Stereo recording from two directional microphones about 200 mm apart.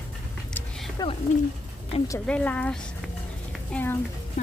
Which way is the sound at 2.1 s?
5° left (ahead or behind).